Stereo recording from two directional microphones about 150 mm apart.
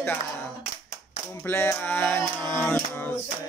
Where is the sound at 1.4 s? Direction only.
15° left (ahead or behind).